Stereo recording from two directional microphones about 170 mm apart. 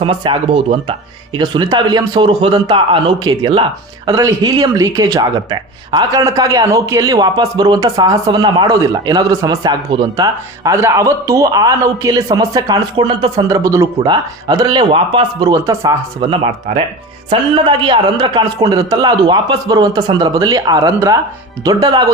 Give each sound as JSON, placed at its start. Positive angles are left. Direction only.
{"t": 0.0, "sound": "a man's voice", "side_deg": -30}
{"t": 16.7, "sound": "speech", "side_deg": -45}
{"t": 17.2, "sound": "a man's voice", "side_deg": -25}